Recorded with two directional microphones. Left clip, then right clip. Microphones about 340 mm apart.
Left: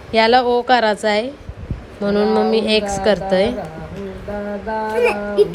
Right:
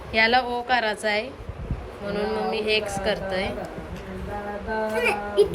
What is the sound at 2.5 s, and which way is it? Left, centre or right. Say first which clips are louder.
A woman's voice: left 7 dB; centre.